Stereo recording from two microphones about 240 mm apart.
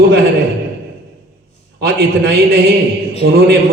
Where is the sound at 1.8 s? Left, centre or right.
Right.